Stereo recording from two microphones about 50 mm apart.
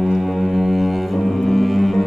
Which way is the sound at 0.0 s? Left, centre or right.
Centre.